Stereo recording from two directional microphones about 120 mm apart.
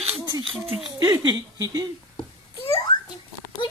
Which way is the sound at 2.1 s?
55° left (ahead or behind).